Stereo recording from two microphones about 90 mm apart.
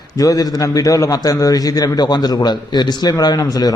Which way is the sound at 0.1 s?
45° left (ahead or behind).